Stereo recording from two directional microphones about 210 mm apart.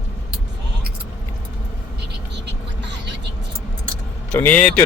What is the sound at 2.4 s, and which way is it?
Music, 55° right (ahead or behind).